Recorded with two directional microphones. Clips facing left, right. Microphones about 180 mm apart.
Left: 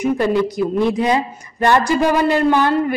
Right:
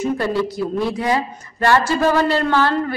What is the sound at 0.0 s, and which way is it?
A woman's voice, 15° left (ahead or behind).